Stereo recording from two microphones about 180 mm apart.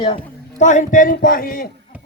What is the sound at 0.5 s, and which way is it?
A man's voice, 40° left (ahead or behind).